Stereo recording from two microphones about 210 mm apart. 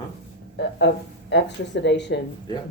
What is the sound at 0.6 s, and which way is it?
Speech, 55° left (ahead or behind).